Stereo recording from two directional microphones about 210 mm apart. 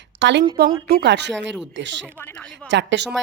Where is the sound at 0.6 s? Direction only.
45° right (ahead or behind).